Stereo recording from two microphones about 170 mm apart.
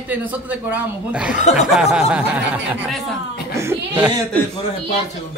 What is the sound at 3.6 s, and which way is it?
Speech, 10° right (ahead or behind).